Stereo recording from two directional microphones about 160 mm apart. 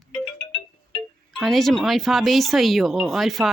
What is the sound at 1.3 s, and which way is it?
Speech, centre (ahead or behind).